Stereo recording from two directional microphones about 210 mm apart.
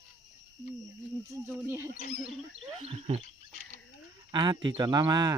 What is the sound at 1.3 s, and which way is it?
Wild animals, 10° right (ahead or behind).